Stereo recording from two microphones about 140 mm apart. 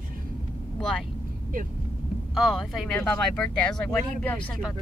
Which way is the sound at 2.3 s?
Centre (ahead or behind).